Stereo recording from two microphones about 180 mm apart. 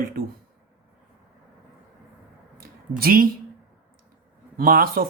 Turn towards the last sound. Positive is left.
turn(degrees=-50)  # may be behind; listen again after turning